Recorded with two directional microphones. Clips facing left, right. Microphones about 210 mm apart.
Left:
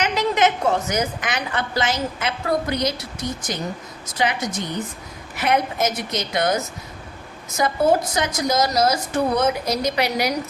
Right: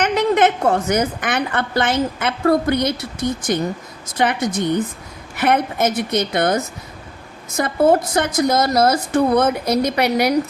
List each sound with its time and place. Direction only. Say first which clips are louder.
0.0 s a woman's voice: right 4 dB; 55° right (ahead or behind)